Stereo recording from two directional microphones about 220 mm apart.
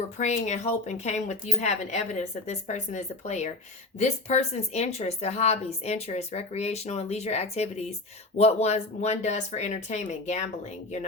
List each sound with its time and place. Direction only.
0.2 s speech: 30° left (ahead or behind)